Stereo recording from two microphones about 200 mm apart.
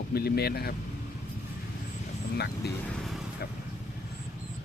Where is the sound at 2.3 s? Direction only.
55° left (ahead or behind).